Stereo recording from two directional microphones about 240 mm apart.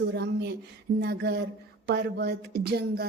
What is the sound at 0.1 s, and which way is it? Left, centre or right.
A woman's voice, right.